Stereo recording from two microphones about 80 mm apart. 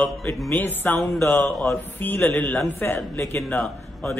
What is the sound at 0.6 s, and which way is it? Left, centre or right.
A man's voice, left.